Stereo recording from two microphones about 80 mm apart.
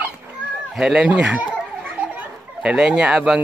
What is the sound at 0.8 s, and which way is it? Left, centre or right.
Speech, centre.